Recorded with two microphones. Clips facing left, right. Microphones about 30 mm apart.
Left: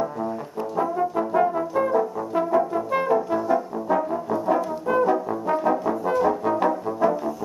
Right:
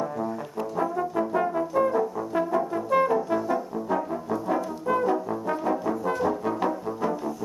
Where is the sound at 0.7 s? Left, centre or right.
Centre.